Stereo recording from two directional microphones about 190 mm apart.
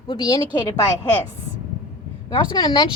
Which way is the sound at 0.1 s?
20° left (ahead or behind).